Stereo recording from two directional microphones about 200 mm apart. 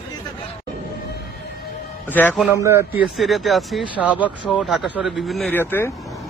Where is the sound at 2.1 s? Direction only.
10° left (ahead or behind).